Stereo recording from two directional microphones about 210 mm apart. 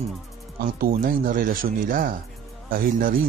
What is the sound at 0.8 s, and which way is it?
Speech, 45° right (ahead or behind).